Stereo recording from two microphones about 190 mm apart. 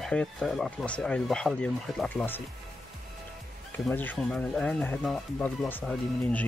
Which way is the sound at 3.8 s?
10° left (ahead or behind).